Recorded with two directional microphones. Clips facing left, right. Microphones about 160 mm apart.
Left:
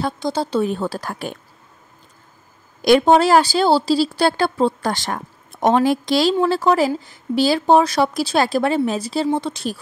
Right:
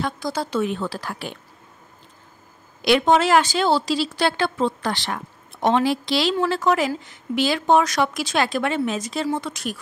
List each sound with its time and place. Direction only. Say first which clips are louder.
0.0 s a woman's voice: left 4 dB; 25° left (ahead or behind); by 1.4 s 45° left (ahead or behind)
2.8 s a woman's voice: left 4 dB; 40° left (ahead or behind)
6.3 s a woman's voice: left 4 dB; 30° left (ahead or behind)